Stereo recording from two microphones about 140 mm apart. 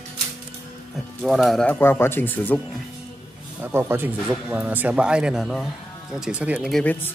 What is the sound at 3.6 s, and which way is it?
Speech, 15° right (ahead or behind).